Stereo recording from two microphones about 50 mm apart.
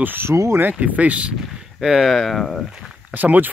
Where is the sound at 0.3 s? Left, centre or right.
Right.